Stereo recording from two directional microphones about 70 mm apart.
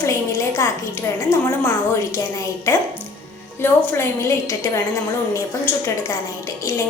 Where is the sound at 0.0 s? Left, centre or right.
Left.